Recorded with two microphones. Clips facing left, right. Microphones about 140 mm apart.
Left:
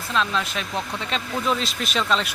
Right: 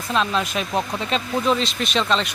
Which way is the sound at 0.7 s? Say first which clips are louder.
Right 5 dB; 40° right (ahead or behind).